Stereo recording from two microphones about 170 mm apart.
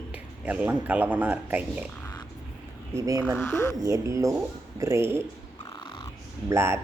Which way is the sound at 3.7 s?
20° right (ahead or behind).